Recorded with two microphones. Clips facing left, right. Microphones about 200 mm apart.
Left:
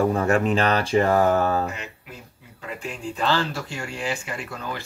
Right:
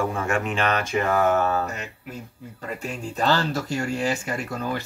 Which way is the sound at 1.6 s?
45° right (ahead or behind).